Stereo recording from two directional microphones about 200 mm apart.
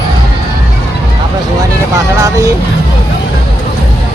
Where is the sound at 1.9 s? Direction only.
15° right (ahead or behind).